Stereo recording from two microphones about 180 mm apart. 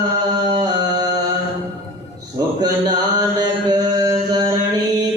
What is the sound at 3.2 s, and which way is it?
Mantra, 20° right (ahead or behind).